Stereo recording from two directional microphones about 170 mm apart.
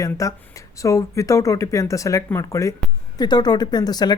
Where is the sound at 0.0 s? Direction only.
20° left (ahead or behind).